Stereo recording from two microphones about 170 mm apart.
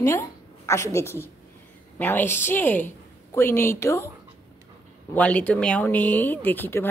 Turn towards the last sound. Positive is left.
turn(degrees=10)  # may be behind; listen again after turning